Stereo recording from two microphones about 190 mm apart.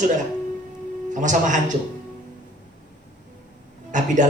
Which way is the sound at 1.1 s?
40° right (ahead or behind).